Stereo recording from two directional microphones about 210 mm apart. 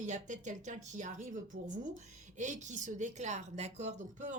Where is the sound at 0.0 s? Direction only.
35° right (ahead or behind).